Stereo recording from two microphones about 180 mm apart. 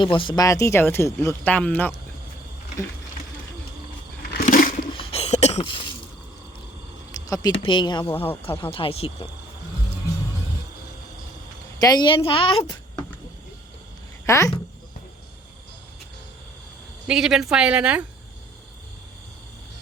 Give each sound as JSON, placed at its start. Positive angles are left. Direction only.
{"t": 0.0, "sound": "speech", "side_deg": 30}
{"t": 4.4, "sound": "a sound", "side_deg": 50}
{"t": 4.9, "sound": "cough", "side_deg": 35}
{"t": 7.3, "sound": "speech", "side_deg": 20}
{"t": 7.5, "sound": "a woman's voice", "side_deg": 30}
{"t": 11.8, "sound": "a woman's voice", "side_deg": 20}
{"t": 14.3, "sound": "speech", "side_deg": 15}
{"t": 17.1, "sound": "speech", "side_deg": -5}